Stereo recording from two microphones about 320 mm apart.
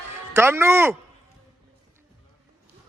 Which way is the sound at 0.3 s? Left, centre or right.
Centre.